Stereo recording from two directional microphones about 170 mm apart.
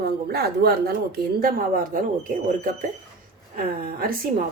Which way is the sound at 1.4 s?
55° right (ahead or behind).